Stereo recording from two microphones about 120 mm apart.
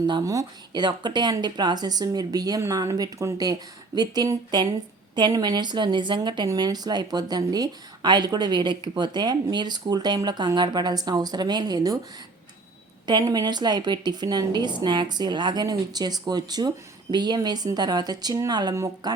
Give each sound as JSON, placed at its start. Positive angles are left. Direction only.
{"t": 0.1, "sound": "a woman's voice", "side_deg": -35}
{"t": 13.1, "sound": "a woman's voice", "side_deg": -35}